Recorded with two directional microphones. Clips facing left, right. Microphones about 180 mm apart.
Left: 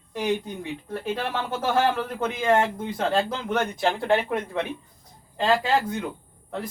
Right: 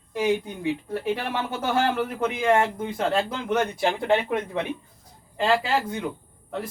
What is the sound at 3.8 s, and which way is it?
Speech, 20° right (ahead or behind).